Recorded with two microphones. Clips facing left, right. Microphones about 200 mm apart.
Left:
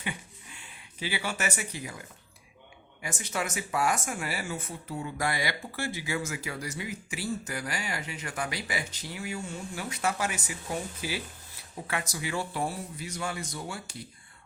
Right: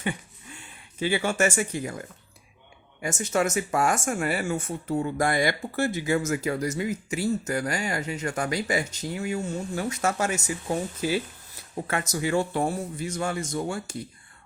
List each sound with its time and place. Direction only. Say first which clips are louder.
0.0 s speech: right 7 dB; 45° right (ahead or behind)